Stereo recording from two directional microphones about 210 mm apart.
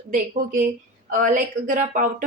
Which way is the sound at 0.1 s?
40° right (ahead or behind).